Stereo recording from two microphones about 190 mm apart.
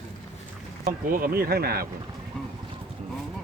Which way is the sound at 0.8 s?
45° right (ahead or behind).